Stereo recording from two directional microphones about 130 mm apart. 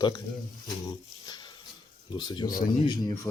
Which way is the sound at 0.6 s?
30° left (ahead or behind).